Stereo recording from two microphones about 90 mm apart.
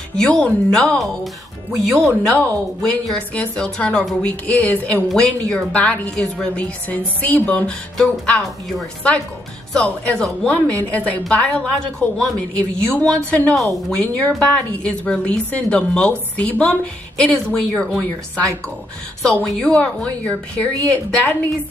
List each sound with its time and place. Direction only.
0.1 s a woman's voice: 10° left (ahead or behind)
2.3 s a woman's voice: 15° left (ahead or behind)
19.4 s a woman's voice: 5° left (ahead or behind)